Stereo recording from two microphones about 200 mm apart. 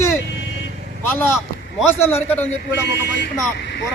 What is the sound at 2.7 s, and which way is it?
Mantra, 55° left (ahead or behind).